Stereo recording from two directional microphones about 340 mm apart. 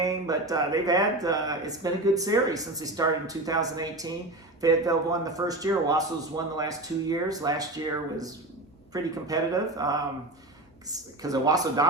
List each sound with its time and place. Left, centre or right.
0.0 s speech: centre
8.9 s speech: centre